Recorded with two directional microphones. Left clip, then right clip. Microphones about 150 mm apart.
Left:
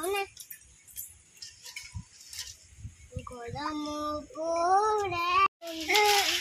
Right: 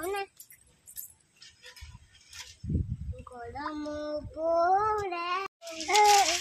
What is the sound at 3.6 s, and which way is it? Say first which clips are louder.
Speech: left 2 dB; centre (ahead or behind).